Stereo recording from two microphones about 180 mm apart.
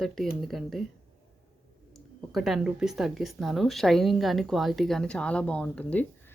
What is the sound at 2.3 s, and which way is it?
A woman's voice, centre (ahead or behind).